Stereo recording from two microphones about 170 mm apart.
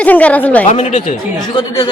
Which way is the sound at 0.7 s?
40° left (ahead or behind).